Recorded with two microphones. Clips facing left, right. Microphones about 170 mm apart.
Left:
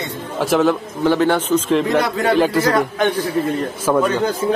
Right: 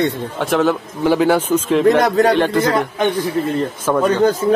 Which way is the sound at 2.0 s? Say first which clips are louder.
Right 5 dB; 40° right (ahead or behind).